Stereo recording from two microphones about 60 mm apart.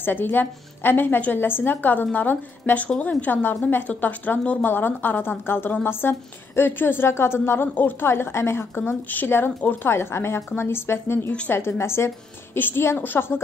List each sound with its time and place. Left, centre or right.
0.0 s a woman's voice: left
4.4 s a woman's voice: left
4.6 s a woman's voice: left
8.1 s a woman's voice: left
9.8 s a woman's voice: left